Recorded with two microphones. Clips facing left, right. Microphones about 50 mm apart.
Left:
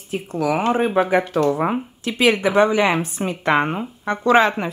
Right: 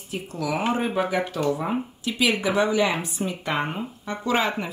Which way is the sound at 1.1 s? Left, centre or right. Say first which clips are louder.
Left 6 dB; left.